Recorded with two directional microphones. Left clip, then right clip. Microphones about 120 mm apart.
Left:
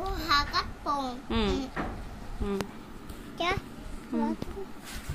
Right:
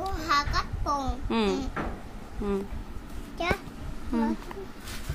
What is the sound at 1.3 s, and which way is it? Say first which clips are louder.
Speech: right 4 dB; 20° right (ahead or behind).